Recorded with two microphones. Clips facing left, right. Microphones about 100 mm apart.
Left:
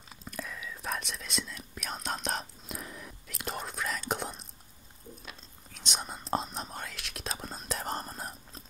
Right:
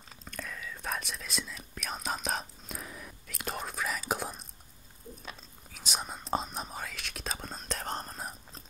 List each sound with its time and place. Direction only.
0.1 s speech: 5° left (ahead or behind)